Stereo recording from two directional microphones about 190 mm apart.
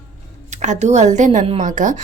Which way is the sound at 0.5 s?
40° right (ahead or behind).